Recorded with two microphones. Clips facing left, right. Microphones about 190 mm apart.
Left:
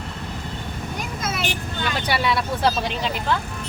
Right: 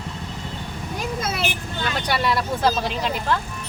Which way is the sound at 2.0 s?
5° left (ahead or behind).